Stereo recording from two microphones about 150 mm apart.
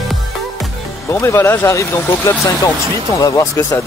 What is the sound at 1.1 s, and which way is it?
Speech, 20° left (ahead or behind).